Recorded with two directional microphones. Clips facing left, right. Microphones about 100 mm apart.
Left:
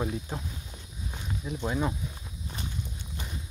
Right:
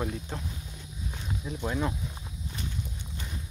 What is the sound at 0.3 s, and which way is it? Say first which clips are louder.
Speech: even; 10° left (ahead or behind).